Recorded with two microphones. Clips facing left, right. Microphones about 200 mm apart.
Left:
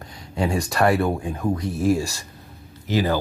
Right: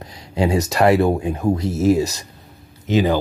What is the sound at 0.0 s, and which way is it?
Speech, 20° right (ahead or behind).